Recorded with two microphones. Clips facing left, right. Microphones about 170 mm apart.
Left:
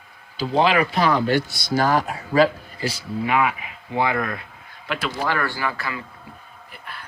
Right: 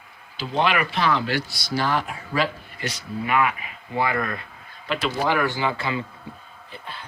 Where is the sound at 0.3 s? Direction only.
35° left (ahead or behind).